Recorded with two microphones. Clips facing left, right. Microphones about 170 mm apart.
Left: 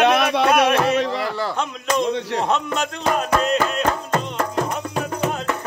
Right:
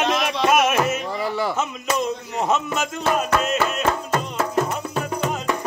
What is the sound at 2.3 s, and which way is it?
Music, 5° right (ahead or behind).